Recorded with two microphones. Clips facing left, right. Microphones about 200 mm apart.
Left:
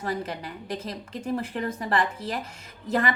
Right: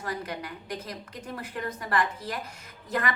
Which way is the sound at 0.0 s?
25° left (ahead or behind).